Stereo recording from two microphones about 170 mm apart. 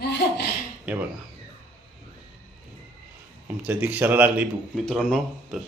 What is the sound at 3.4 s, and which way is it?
A man's voice, 10° right (ahead or behind).